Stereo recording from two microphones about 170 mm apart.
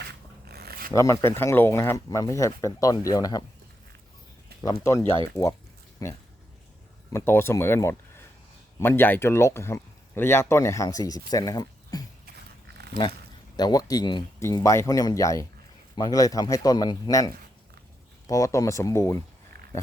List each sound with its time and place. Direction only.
0.4 s a sound: 65° right (ahead or behind)
0.9 s speech: 20° left (ahead or behind)
4.6 s speech: 20° left (ahead or behind)
13.6 s speech: 25° left (ahead or behind)